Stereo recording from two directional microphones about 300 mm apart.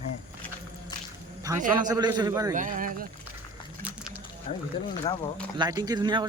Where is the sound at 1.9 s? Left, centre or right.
Centre.